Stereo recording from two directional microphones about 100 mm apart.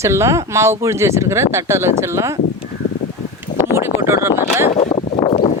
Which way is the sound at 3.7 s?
25° right (ahead or behind).